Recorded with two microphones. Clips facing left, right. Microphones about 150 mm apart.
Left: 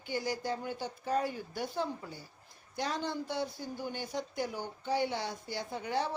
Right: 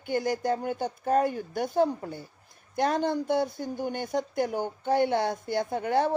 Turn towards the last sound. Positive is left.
turn(degrees=-55)  # may be behind; listen again after turning